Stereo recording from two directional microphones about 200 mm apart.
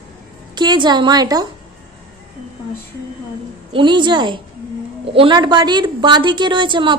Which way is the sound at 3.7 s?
25° right (ahead or behind).